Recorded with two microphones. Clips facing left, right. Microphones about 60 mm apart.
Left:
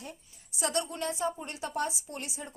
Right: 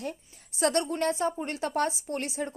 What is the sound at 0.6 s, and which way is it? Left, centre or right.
A woman's voice, right.